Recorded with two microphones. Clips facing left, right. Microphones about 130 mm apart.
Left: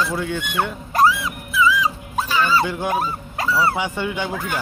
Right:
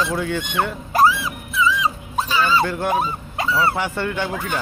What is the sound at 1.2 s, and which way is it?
Music, 5° left (ahead or behind).